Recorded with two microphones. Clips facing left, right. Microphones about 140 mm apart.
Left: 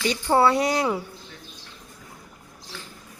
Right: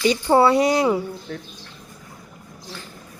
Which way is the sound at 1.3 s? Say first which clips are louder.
Right 13 dB; 65° right (ahead or behind).